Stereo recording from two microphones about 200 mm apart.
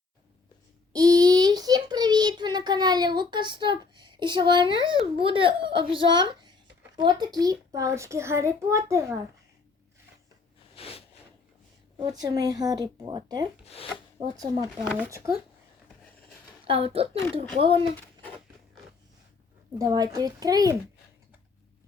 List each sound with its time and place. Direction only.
0.9 s a child's voice: 20° right (ahead or behind)
10.8 s a sound: 30° left (ahead or behind)
11.9 s a child's voice: 20° right (ahead or behind)
16.6 s speech: 25° right (ahead or behind)
19.8 s speech: 20° right (ahead or behind)